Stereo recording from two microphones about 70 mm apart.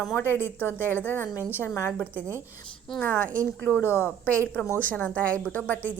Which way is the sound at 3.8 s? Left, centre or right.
Left.